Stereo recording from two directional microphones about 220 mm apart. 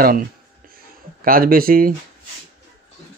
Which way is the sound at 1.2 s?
40° right (ahead or behind).